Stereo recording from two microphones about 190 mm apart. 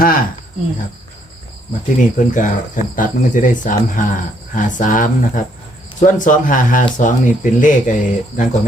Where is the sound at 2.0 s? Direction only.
45° left (ahead or behind).